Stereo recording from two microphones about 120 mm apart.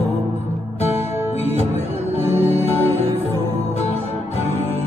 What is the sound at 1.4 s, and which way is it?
Music, 60° left (ahead or behind).